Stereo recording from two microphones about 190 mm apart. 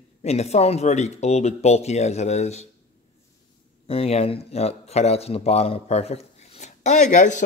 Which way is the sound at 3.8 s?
30° left (ahead or behind).